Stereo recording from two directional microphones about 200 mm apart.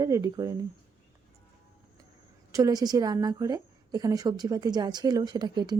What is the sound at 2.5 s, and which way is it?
A woman's voice, 15° right (ahead or behind).